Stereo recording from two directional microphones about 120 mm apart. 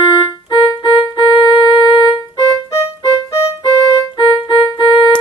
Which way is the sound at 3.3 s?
25° left (ahead or behind).